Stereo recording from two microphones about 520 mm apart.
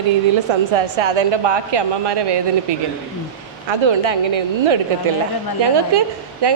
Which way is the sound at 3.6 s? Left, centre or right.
Right.